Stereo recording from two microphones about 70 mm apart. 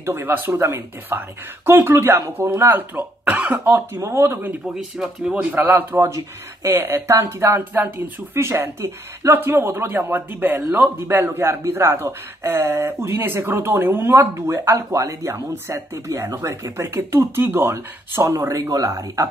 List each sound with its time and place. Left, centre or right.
0.0 s a man's voice: right
4.7 s speech: centre
5.6 s a man's voice: right
14.9 s a man's voice: right